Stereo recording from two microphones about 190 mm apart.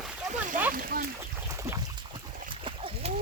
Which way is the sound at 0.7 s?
50° right (ahead or behind).